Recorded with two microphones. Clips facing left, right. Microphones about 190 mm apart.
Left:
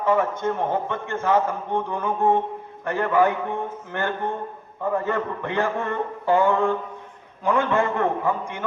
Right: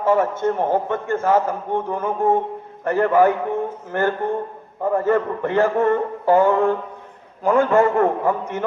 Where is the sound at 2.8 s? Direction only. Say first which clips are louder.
Right 5 dB; 40° right (ahead or behind).